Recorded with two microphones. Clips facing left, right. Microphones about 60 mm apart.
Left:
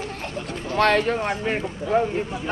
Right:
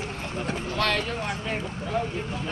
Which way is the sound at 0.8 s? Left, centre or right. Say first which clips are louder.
Left 9 dB; left.